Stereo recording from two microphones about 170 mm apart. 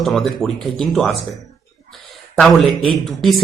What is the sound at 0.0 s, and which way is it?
Speech, centre (ahead or behind).